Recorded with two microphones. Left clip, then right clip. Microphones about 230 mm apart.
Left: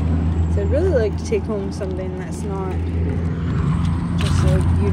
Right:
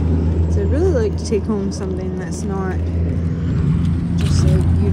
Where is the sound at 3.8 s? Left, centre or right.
Centre.